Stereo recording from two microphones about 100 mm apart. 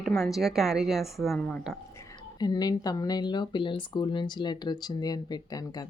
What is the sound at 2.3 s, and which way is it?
Speech, 40° left (ahead or behind).